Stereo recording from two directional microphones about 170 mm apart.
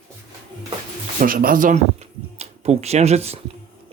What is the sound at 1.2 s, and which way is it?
Speech, 55° right (ahead or behind).